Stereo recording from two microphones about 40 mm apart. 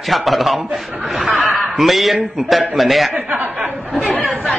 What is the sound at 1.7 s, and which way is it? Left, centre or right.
A man's voice, centre.